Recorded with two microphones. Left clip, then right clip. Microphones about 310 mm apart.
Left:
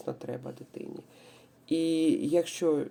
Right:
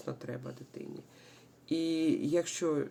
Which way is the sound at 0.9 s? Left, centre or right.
Right.